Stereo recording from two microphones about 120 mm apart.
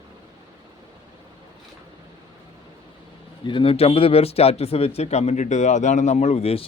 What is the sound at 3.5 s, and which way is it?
Speech, 45° left (ahead or behind).